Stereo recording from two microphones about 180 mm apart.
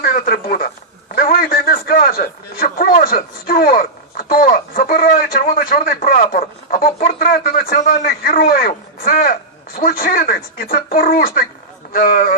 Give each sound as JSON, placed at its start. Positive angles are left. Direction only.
{"t": 0.0, "sound": "a man's voice", "side_deg": 50}